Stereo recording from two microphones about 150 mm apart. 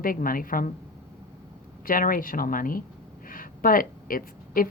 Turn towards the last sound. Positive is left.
turn(degrees=70)  # may be behind; listen again after turning